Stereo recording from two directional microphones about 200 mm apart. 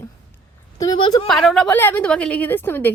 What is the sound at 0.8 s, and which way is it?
Speech, 20° left (ahead or behind).